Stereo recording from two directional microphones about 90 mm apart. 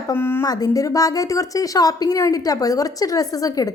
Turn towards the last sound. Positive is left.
turn(degrees=40)  # may be behind; listen again after turning